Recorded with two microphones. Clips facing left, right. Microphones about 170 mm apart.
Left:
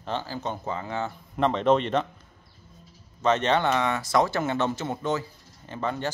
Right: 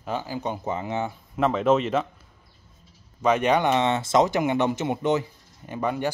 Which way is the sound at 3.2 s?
10° right (ahead or behind).